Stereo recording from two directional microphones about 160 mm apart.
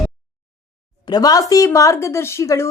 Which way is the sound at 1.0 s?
25° left (ahead or behind).